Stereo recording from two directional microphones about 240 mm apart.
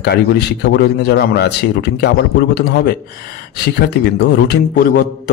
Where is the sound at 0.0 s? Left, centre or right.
Left.